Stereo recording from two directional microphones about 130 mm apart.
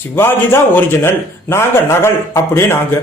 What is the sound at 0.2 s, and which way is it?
A man's voice, 15° left (ahead or behind).